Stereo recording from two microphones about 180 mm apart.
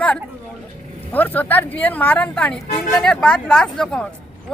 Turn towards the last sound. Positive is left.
turn(degrees=5)  # may be behind; listen again after turning